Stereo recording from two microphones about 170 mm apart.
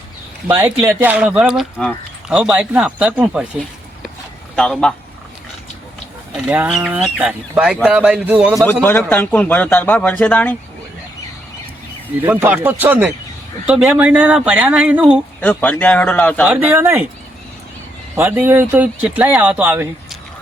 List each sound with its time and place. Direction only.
0.4 s speech: 10° right (ahead or behind)
4.5 s speech: 5° left (ahead or behind)
6.3 s speech: 5° right (ahead or behind)
8.6 s a man's voice: 10° left (ahead or behind)
12.2 s speech: 10° right (ahead or behind)
15.4 s a man's voice: 10° left (ahead or behind)
16.5 s speech: 10° right (ahead or behind)
18.2 s speech: 10° right (ahead or behind)